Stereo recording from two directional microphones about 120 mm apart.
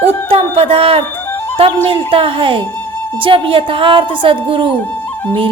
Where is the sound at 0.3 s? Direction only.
55° right (ahead or behind).